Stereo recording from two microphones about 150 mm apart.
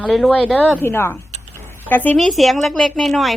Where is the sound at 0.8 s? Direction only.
15° left (ahead or behind).